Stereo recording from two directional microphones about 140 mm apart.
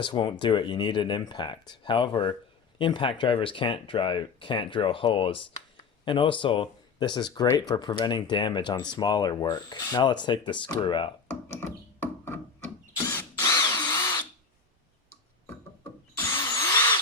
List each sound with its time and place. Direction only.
0.0 s speech: 35° left (ahead or behind)
11.3 s music: 15° left (ahead or behind)
13.1 s drill: 20° left (ahead or behind)
16.1 s tools: 20° left (ahead or behind)